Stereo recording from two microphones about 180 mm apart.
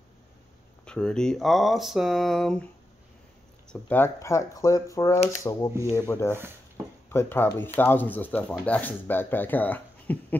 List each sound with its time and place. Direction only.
0.8 s speech: 5° left (ahead or behind)
3.7 s speech: 10° left (ahead or behind)